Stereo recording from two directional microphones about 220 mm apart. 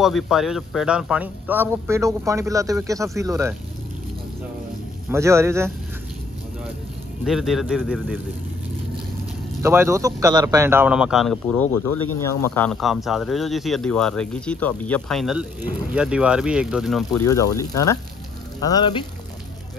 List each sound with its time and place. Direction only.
0.0 s speech: centre (ahead or behind)
5.1 s speech: 10° right (ahead or behind)
7.2 s speech: centre (ahead or behind)
9.6 s speech: 10° right (ahead or behind)
17.2 s speech: 15° left (ahead or behind)